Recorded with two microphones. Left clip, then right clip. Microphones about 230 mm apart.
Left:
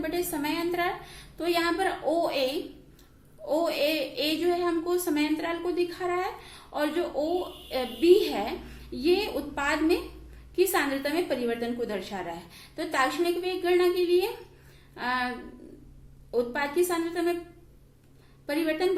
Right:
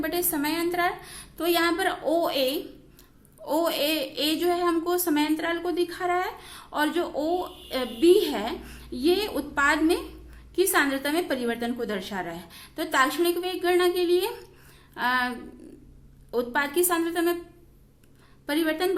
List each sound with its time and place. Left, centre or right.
0.0 s a woman's voice: right
16.3 s a woman's voice: right
18.4 s a woman's voice: right